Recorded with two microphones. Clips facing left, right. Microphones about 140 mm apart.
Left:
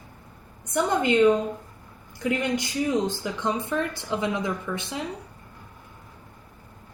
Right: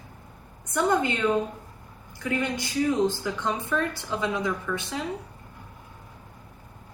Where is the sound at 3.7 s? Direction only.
20° left (ahead or behind).